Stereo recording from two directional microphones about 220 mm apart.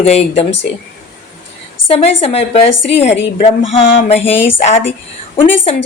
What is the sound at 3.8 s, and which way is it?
Speech, 25° left (ahead or behind).